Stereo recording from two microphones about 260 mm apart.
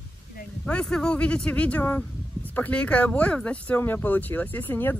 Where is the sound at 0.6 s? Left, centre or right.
Centre.